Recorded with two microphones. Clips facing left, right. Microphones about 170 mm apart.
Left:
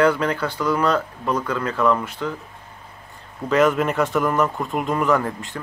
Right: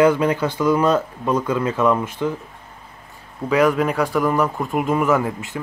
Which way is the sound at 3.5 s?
Centre (ahead or behind).